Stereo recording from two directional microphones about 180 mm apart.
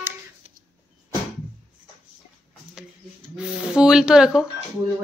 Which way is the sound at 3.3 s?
5° right (ahead or behind).